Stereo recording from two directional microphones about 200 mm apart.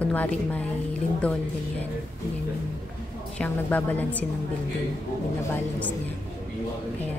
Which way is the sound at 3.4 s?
10° left (ahead or behind).